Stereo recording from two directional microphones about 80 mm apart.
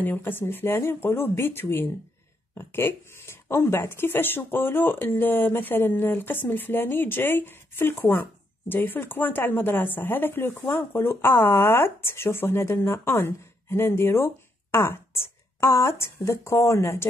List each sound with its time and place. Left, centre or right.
0.0 s speech: left